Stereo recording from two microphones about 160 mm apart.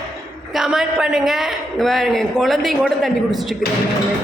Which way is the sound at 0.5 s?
5° right (ahead or behind).